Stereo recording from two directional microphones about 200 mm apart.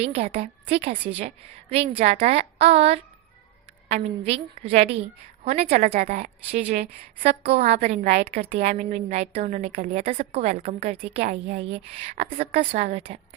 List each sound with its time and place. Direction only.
0.0 s a woman's voice: 35° right (ahead or behind)